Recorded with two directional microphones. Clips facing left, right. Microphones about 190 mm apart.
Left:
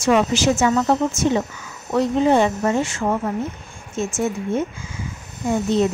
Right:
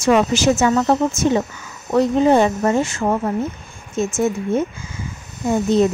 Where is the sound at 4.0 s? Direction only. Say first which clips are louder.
Right 3 dB; 40° right (ahead or behind).